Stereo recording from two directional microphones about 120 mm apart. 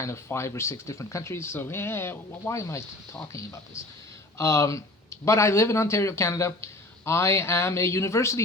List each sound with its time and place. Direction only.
0.0 s speech: 25° left (ahead or behind)